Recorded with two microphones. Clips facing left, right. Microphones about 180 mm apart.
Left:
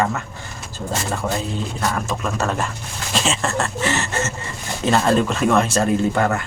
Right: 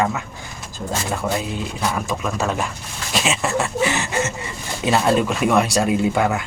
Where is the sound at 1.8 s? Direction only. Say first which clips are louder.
Right 1 dB; 10° right (ahead or behind).